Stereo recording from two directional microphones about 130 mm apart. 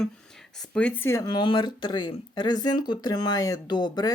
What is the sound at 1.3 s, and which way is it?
Speech, 35° left (ahead or behind).